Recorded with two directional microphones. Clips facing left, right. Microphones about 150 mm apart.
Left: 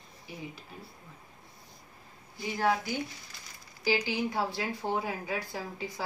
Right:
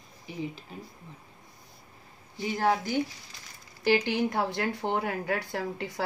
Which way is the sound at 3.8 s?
60° right (ahead or behind).